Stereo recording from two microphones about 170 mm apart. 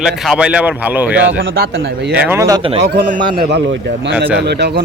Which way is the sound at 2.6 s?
30° right (ahead or behind).